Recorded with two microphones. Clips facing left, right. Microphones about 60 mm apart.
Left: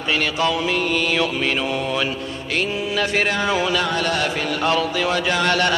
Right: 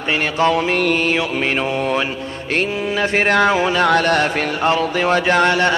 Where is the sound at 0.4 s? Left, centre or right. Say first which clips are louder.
Right 8 dB; right.